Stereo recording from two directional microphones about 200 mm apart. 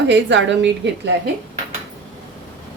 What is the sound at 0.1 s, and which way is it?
A woman's voice, 65° right (ahead or behind).